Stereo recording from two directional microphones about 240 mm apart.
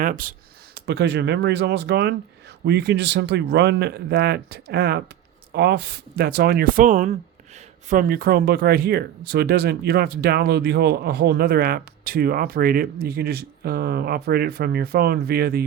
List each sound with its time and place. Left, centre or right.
0.0 s speech: right